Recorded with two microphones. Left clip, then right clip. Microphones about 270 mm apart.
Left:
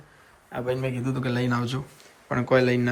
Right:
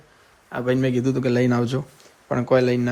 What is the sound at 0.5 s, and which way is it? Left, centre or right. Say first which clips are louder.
A man's voice: right 6 dB; right.